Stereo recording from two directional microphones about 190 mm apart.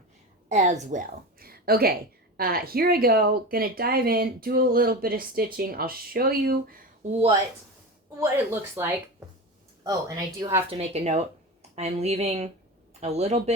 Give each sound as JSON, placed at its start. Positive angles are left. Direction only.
{"t": 0.4, "sound": "a woman's voice", "side_deg": -40}
{"t": 7.1, "sound": "speech", "side_deg": -30}
{"t": 8.2, "sound": "a woman's voice", "side_deg": -15}
{"t": 10.7, "sound": "speech", "side_deg": -35}